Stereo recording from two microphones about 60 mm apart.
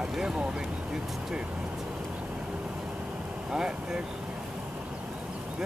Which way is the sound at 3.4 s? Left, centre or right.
Centre.